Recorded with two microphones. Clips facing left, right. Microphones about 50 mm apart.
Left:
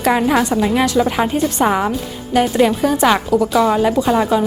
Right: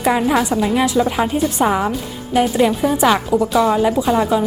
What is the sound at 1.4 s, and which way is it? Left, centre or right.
Speech, centre.